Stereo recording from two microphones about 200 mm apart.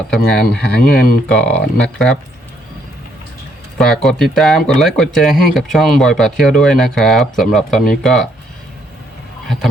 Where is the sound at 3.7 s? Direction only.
5° left (ahead or behind).